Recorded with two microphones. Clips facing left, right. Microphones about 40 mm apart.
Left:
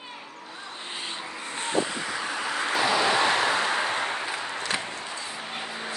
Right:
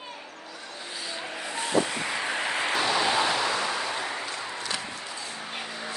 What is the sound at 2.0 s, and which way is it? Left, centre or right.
Vehicle, right.